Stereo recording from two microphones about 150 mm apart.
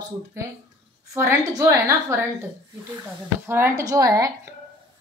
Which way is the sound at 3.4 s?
15° right (ahead or behind).